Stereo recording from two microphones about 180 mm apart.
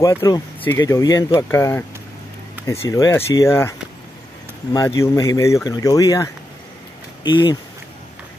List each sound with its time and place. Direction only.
0.0 s speech: 15° left (ahead or behind)
4.7 s speech: 15° left (ahead or behind)